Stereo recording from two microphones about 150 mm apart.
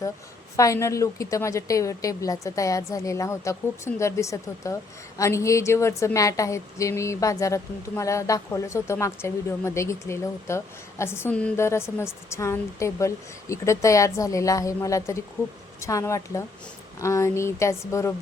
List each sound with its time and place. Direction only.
0.5 s a woman's voice: 20° left (ahead or behind)